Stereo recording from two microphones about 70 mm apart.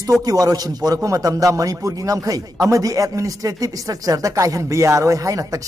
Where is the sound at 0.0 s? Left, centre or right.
Right.